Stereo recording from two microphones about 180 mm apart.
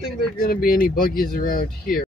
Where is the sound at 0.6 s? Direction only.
50° left (ahead or behind).